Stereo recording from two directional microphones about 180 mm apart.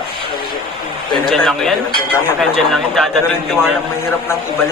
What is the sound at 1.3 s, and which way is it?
Speech, 5° left (ahead or behind).